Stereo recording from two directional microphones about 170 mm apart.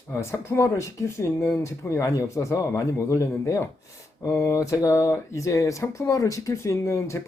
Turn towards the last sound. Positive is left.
turn(degrees=15)  # may be behind; listen again after turning